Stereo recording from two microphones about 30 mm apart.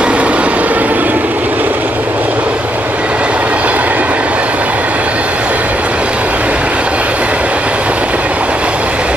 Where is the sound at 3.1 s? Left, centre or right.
Right.